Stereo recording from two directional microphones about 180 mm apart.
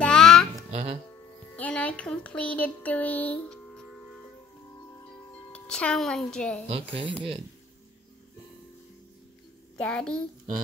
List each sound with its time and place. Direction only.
0.0 s a sound: 5° left (ahead or behind)
0.7 s music: 35° right (ahead or behind)
1.6 s a sound: 5° left (ahead or behind)
5.5 s speech: 5° left (ahead or behind)
6.7 s speech: 30° right (ahead or behind)
9.8 s a child's voice: 5° left (ahead or behind)